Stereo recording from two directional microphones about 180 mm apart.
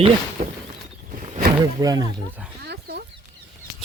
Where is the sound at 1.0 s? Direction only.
45° right (ahead or behind).